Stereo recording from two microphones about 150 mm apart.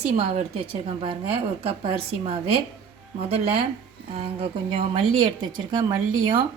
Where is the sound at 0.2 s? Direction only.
40° right (ahead or behind).